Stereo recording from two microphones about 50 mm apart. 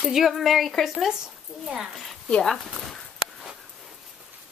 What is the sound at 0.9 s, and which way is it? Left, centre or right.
Speech, centre.